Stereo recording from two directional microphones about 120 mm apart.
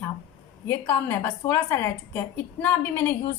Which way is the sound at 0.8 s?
15° left (ahead or behind).